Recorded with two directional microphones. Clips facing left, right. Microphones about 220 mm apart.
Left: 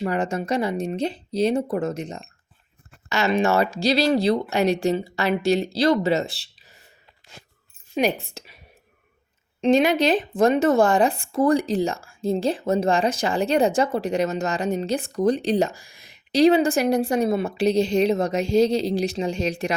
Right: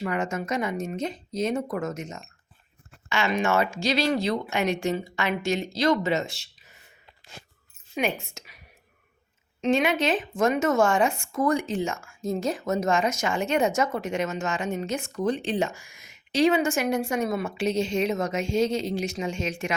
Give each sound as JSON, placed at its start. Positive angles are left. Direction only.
{"t": 0.0, "sound": "speech", "side_deg": 35}
{"t": 8.2, "sound": "a woman's voice", "side_deg": 35}
{"t": 9.6, "sound": "speech", "side_deg": 35}